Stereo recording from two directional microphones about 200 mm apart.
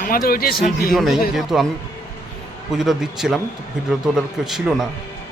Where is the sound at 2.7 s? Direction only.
Centre (ahead or behind).